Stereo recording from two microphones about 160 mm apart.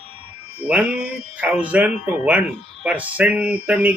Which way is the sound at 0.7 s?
10° right (ahead or behind).